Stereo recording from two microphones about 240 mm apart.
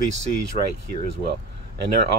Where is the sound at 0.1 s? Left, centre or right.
Right.